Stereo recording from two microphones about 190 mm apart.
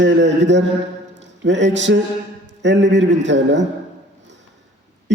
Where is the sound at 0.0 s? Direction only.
70° right (ahead or behind).